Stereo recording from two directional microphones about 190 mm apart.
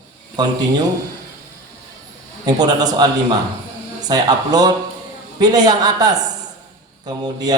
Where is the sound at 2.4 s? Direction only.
20° right (ahead or behind).